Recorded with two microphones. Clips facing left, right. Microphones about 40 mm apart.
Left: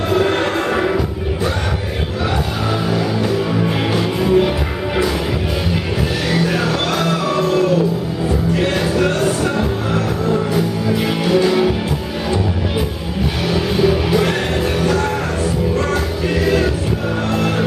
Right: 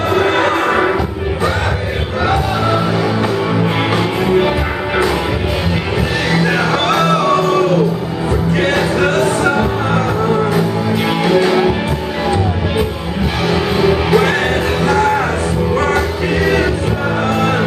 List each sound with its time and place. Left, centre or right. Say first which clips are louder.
0.1 s music: right 3 dB; right
2.2 s music: right 6 dB; centre
6.4 s music: right 3 dB; right
11.2 s music: right 2 dB; right
13.5 s music: right 2 dB; right
16.3 s music: right 2 dB; centre